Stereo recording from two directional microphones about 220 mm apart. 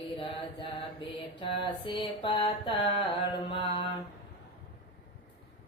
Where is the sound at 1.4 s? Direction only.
20° left (ahead or behind).